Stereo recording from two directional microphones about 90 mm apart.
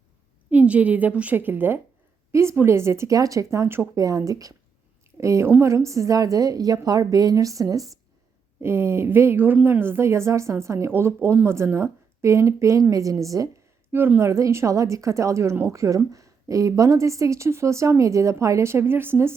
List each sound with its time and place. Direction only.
0.5 s a woman's voice: 15° right (ahead or behind); by 7.9 s 40° right (ahead or behind)
8.6 s a woman's voice: 25° right (ahead or behind)
13.9 s a woman's voice: 25° right (ahead or behind)